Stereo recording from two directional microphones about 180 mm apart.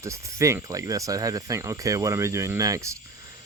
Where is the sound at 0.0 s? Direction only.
15° right (ahead or behind).